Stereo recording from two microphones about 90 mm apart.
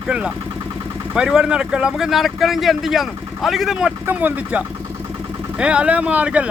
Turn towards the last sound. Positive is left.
turn(degrees=-15)  # may be behind; listen again after turning